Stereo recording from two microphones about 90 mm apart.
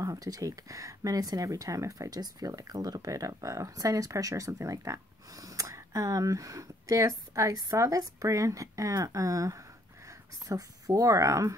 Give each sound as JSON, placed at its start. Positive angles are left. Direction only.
{"t": 0.0, "sound": "speech", "side_deg": -40}